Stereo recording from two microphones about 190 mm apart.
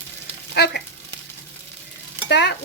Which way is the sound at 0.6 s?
60° left (ahead or behind).